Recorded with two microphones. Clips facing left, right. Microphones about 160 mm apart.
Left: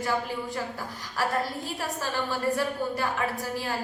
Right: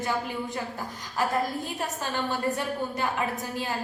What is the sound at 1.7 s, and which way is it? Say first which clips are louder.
A woman's voice: even; 20° right (ahead or behind).